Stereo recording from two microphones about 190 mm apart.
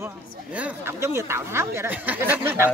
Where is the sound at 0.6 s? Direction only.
15° right (ahead or behind).